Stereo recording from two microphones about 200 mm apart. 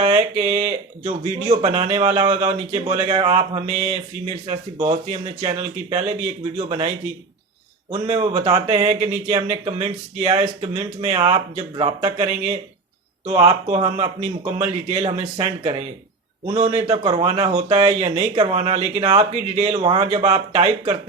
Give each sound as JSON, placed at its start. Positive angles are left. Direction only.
{"t": 0.1, "sound": "speech", "side_deg": -35}
{"t": 13.7, "sound": "speech", "side_deg": -25}